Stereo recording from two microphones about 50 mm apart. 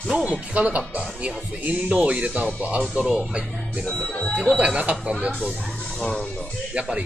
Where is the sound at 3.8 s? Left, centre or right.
Centre.